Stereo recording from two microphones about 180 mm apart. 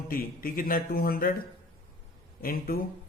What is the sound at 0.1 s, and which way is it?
A man's voice, 55° left (ahead or behind).